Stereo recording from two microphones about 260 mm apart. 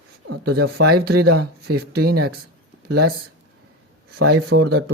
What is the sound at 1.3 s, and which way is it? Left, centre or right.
Speech, right.